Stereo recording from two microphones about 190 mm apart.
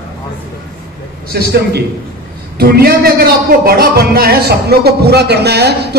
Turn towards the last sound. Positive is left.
turn(degrees=-60)  # may be behind; listen again after turning